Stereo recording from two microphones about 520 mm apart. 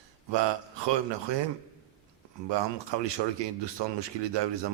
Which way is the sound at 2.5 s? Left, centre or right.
Right.